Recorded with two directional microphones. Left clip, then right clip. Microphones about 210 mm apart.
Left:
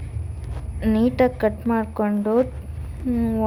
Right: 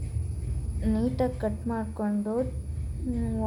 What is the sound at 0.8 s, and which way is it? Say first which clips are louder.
A woman's voice: left 9 dB; 30° left (ahead or behind).